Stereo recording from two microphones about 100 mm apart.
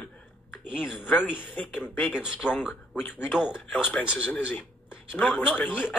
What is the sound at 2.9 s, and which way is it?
Speech, 20° left (ahead or behind).